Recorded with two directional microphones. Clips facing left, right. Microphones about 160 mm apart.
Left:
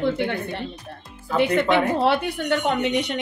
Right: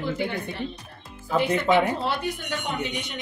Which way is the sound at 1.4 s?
65° left (ahead or behind).